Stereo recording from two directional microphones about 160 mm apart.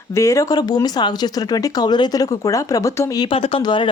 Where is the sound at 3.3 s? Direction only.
35° left (ahead or behind).